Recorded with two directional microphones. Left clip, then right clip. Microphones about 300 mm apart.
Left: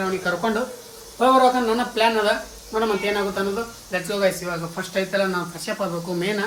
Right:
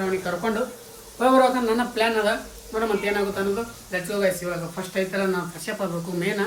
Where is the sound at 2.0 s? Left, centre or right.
Centre.